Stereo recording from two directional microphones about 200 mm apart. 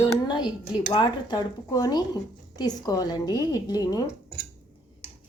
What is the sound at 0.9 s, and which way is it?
A woman's voice, 20° left (ahead or behind).